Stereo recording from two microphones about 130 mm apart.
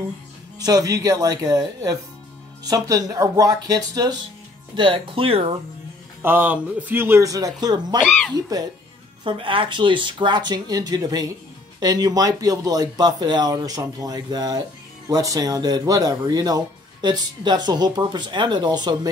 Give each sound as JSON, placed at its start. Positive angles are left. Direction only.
{"t": 0.6, "sound": "speech", "side_deg": -30}
{"t": 6.2, "sound": "a man's voice", "side_deg": -15}
{"t": 8.0, "sound": "speech", "side_deg": 5}
{"t": 9.2, "sound": "speech", "side_deg": -40}